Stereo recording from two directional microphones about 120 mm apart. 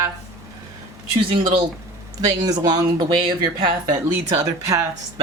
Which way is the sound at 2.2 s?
35° right (ahead or behind).